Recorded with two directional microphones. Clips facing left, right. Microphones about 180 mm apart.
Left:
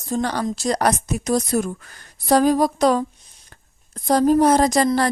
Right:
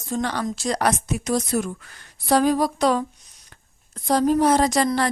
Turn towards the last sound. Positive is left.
turn(degrees=40)  # may be behind; listen again after turning